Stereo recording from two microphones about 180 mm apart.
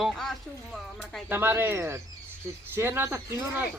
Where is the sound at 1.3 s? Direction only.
10° right (ahead or behind).